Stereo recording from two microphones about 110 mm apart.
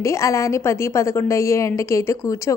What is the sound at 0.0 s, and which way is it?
A woman's voice, 25° left (ahead or behind).